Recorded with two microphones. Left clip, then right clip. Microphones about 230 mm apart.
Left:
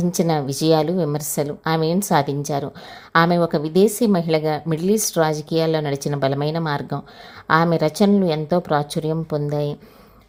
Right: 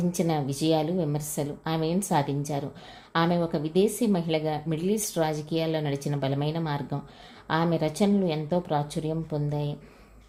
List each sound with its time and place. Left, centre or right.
0.0 s a woman's voice: left